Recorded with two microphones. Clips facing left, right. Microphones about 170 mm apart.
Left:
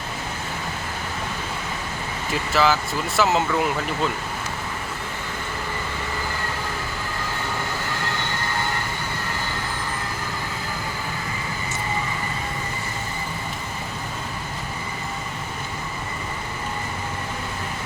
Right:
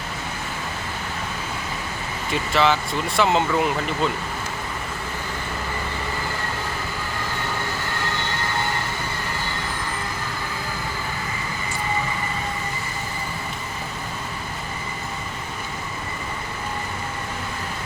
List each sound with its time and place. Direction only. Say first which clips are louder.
2.3 s speech: even; centre (ahead or behind)